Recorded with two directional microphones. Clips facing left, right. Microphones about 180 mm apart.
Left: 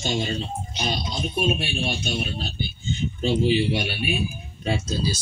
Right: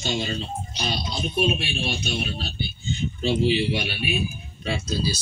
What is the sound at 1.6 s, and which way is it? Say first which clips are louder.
Speech: left 1 dB; 50° left (ahead or behind).